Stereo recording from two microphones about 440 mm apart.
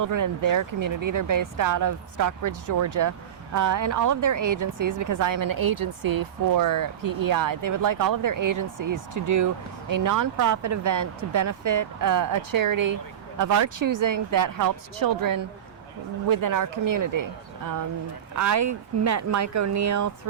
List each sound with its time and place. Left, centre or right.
0.0 s speech: right
18.3 s speech: right